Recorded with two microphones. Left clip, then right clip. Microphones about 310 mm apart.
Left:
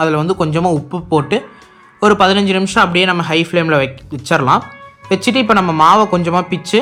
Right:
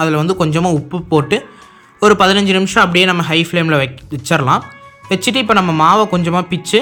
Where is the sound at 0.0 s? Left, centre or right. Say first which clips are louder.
Even; centre.